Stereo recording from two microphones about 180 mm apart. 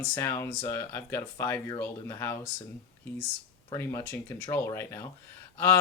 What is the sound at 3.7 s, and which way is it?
Speech, 15° left (ahead or behind).